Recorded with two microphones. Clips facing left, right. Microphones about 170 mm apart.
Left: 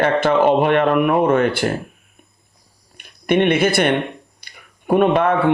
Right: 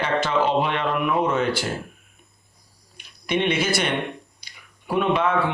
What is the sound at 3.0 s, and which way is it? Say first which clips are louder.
Speech: left 7 dB; 55° left (ahead or behind).